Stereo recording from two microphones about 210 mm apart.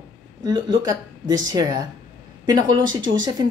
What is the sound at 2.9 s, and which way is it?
Speech, 65° right (ahead or behind).